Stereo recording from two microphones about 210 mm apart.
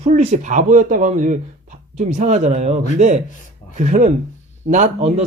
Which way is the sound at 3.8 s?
35° right (ahead or behind).